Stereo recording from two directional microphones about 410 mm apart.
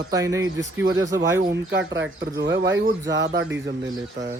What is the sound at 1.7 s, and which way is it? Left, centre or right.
Speech, right.